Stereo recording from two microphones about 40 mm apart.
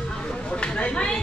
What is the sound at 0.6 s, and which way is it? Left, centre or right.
Speech, left.